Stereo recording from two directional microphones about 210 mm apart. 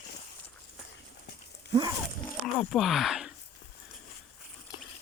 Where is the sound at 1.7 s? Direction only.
20° right (ahead or behind).